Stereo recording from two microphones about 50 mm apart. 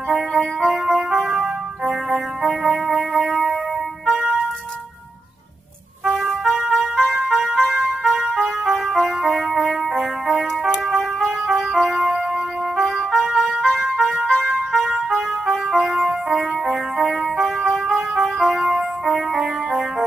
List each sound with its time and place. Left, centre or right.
0.1 s music: centre
6.2 s music: centre
18.6 s music: centre
19.0 s music: centre